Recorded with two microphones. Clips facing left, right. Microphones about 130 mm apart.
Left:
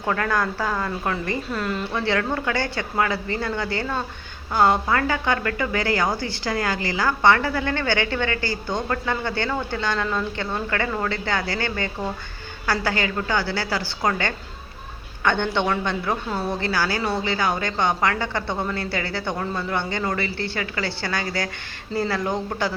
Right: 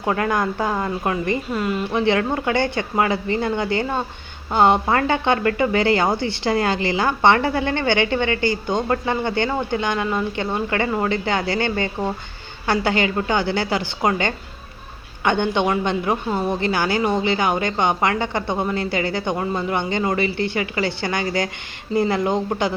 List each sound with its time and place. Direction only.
0.0 s a woman's voice: 20° right (ahead or behind)